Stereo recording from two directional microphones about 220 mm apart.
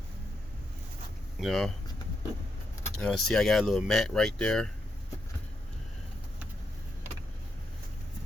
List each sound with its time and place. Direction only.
1.4 s speech: centre (ahead or behind)
3.0 s speech: 5° left (ahead or behind)